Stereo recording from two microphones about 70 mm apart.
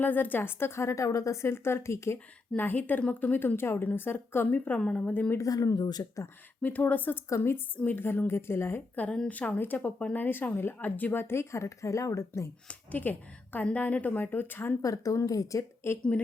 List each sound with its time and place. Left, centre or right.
0.0 s speech: left
2.6 s a woman's voice: left
4.8 s speech: centre
5.4 s speech: left
6.6 s a woman's voice: left
7.3 s speech: left
9.3 s speech: left
12.6 s a woman's voice: left
14.8 s speech: left
15.8 s speech: left